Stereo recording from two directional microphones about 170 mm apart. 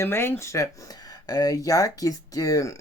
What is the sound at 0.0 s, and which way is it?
Speech, 15° left (ahead or behind).